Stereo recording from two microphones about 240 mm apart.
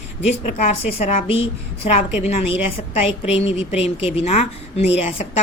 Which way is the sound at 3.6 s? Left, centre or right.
Left.